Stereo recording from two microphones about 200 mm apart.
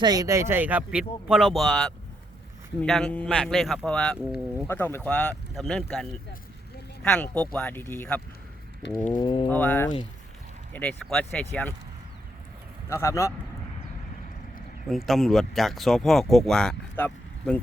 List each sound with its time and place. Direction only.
0.0 s speech: 20° right (ahead or behind); by 4.7 s 5° right (ahead or behind)
4.7 s speech: 10° left (ahead or behind)
9.1 s speech: 25° left (ahead or behind)
9.5 s speech: 10° left (ahead or behind)
12.9 s speech: 15° left (ahead or behind)
14.8 s speech: centre (ahead or behind)